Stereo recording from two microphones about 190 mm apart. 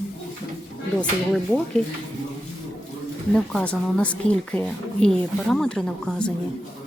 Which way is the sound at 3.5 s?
5° left (ahead or behind).